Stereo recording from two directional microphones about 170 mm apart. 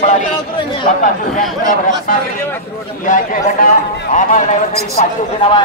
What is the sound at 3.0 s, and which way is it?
A man's voice, 50° left (ahead or behind).